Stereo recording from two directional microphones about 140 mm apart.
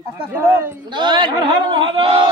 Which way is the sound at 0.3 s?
15° right (ahead or behind).